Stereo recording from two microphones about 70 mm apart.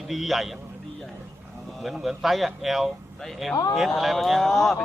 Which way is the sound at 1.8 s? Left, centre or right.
Centre.